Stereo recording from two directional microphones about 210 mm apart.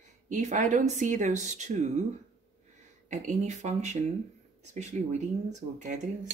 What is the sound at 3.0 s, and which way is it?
Speech, 35° right (ahead or behind).